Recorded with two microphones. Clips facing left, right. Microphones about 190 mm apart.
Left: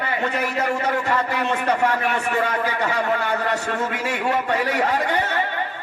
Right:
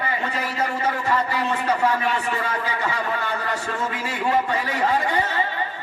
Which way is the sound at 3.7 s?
65° left (ahead or behind).